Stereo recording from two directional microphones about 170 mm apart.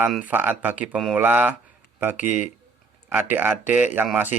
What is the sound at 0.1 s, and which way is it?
A man's voice, 10° right (ahead or behind).